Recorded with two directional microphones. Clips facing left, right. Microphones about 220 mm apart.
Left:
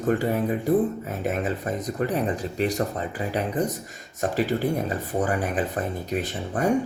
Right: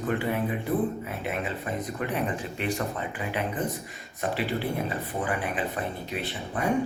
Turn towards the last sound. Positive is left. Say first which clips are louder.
# left 5 dB
turn(degrees=45)  # may be behind; listen again after turning